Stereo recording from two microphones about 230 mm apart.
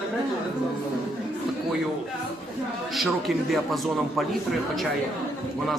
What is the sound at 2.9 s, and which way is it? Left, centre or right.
Speech, centre.